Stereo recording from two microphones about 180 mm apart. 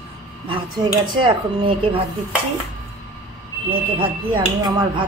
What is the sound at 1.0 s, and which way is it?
Speech, 25° right (ahead or behind).